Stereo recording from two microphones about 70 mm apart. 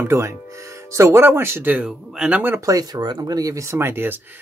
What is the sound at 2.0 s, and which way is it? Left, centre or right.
Speech, centre.